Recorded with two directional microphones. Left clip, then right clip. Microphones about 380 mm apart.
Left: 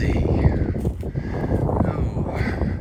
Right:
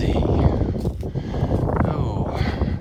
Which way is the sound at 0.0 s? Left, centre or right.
Centre.